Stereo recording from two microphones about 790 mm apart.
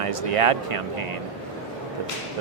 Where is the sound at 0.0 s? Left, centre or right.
Right.